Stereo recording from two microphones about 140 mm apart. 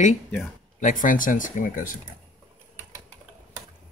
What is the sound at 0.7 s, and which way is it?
Speech, 70° left (ahead or behind).